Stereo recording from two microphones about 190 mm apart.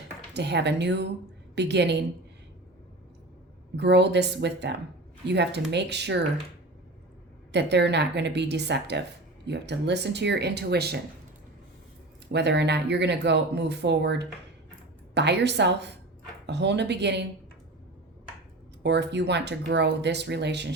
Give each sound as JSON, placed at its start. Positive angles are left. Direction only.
{"t": 0.3, "sound": "speech", "side_deg": -65}
{"t": 3.8, "sound": "speech", "side_deg": -65}
{"t": 7.5, "sound": "speech", "side_deg": -65}
{"t": 12.3, "sound": "speech", "side_deg": -65}
{"t": 18.8, "sound": "speech", "side_deg": -65}